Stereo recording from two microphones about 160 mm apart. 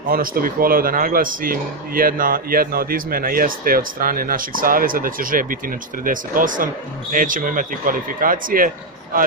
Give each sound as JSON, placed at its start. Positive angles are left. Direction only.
{"t": 0.1, "sound": "speech", "side_deg": -65}